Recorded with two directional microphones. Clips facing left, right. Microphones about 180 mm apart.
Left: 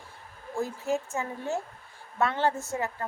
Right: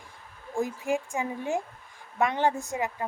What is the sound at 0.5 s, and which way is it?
A woman's voice, 15° right (ahead or behind).